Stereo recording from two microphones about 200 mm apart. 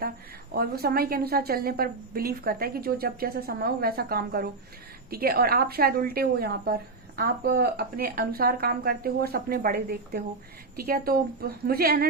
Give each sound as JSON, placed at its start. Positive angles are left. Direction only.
{"t": 0.5, "sound": "a woman's voice", "side_deg": -50}